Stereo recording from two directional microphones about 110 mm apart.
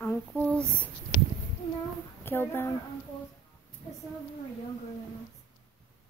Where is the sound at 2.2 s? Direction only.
20° left (ahead or behind).